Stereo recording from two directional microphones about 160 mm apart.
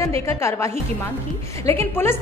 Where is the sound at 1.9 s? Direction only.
15° left (ahead or behind).